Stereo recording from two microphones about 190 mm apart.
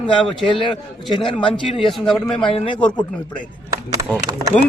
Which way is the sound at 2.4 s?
30° left (ahead or behind).